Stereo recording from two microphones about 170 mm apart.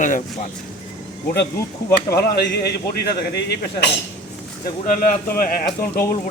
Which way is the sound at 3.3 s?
85° left.